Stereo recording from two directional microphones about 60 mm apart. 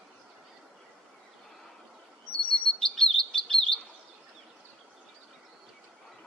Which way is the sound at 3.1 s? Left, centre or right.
Centre.